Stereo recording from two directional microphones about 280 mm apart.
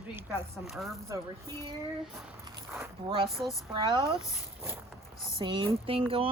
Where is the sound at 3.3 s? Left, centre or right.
Centre.